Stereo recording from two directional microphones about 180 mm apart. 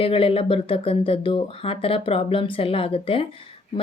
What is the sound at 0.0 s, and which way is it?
Speech, 30° left (ahead or behind).